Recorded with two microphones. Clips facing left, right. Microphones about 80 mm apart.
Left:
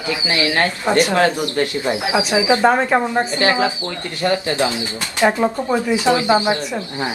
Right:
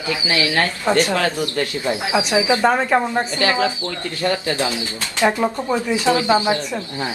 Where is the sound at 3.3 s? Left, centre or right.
Left.